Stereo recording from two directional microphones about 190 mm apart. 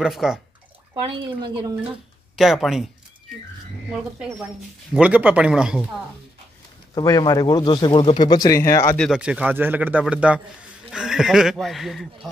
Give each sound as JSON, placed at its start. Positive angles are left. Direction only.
{"t": 0.0, "sound": "speech", "side_deg": -5}
{"t": 1.1, "sound": "speech", "side_deg": -25}
{"t": 2.3, "sound": "speech", "side_deg": 0}
{"t": 4.9, "sound": "speech", "side_deg": -5}
{"t": 7.0, "sound": "speech", "side_deg": 20}
{"t": 8.9, "sound": "a man's voice", "side_deg": 0}